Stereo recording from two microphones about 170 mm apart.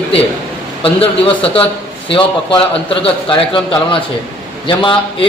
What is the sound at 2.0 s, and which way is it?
A man's voice, 30° left (ahead or behind).